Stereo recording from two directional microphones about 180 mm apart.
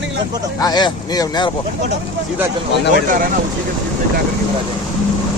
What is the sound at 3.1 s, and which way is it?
Speech, 50° right (ahead or behind).